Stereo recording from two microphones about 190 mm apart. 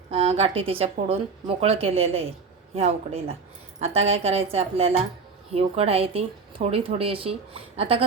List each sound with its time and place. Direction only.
0.1 s a woman's voice: 30° right (ahead or behind)